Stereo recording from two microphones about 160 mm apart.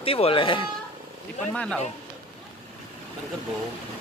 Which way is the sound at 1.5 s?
5° left (ahead or behind).